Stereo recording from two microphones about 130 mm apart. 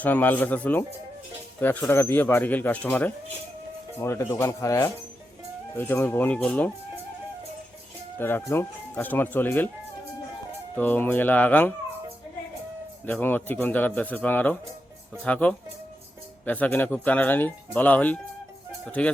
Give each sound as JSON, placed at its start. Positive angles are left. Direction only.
{"t": 0.0, "sound": "speech", "side_deg": 15}
{"t": 8.2, "sound": "speech", "side_deg": 15}
{"t": 10.8, "sound": "speech", "side_deg": 15}
{"t": 13.1, "sound": "speech", "side_deg": 15}